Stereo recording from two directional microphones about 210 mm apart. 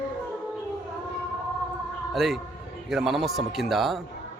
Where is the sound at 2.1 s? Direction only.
Centre (ahead or behind).